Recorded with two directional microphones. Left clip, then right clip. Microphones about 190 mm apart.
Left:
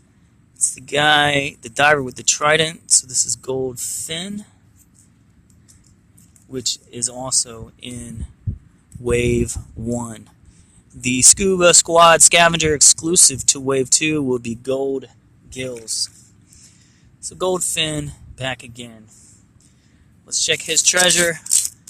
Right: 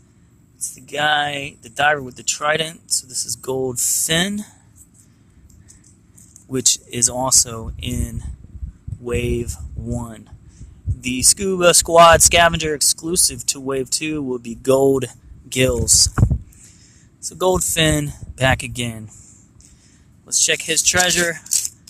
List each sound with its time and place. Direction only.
0.8 s speech: centre (ahead or behind)
3.4 s speech: 10° right (ahead or behind)
6.5 s speech: 20° right (ahead or behind)
9.0 s speech: centre (ahead or behind)
14.6 s speech: 25° right (ahead or behind)
17.2 s speech: 15° right (ahead or behind)
20.2 s speech: 10° right (ahead or behind)